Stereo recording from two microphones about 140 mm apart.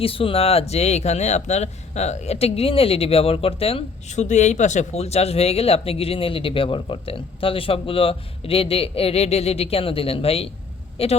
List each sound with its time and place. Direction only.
0.0 s speech: 40° left (ahead or behind)